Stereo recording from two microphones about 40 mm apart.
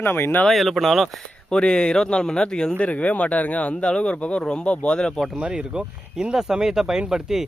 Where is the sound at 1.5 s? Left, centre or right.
Left.